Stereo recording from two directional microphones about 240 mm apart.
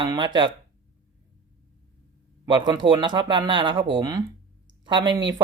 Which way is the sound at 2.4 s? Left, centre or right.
Centre.